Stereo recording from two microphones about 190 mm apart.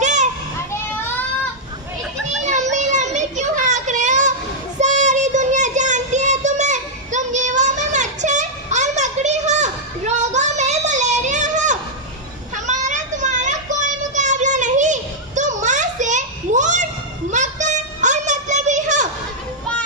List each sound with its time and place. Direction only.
0.0 s children playing: 40° right (ahead or behind)
2.4 s child singing: 40° right (ahead or behind)
15.4 s a sound: 40° right (ahead or behind)